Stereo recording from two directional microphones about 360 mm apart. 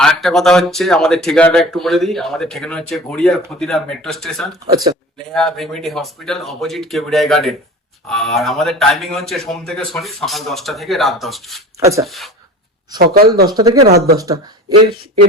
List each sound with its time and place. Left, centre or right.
0.0 s speech: centre
13.0 s speech: right
13.5 s speech: centre
13.8 s speech: right
14.8 s speech: right